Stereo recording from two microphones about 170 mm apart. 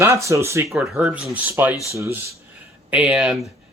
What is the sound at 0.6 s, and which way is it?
Speech, centre (ahead or behind).